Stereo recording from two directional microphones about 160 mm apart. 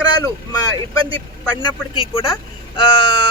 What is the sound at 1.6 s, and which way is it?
Speech, 35° left (ahead or behind).